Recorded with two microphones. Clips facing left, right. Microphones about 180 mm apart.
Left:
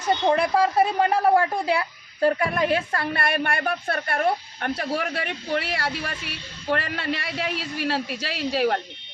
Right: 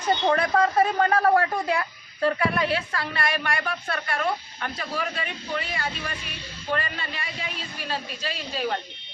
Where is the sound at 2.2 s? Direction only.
40° left (ahead or behind); by 8.8 s 70° left (ahead or behind).